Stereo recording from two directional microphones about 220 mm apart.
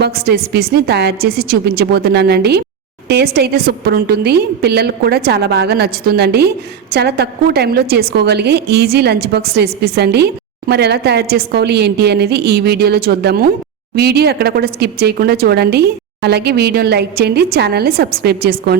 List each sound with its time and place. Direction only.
0.0 s speech: 45° right (ahead or behind)